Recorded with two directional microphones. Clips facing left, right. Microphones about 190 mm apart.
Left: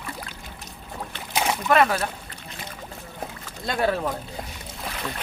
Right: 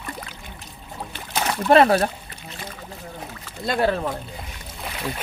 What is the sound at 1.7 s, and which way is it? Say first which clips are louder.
Speech: right 6 dB; 30° right (ahead or behind).